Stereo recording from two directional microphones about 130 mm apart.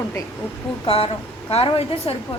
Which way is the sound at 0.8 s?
45° left (ahead or behind).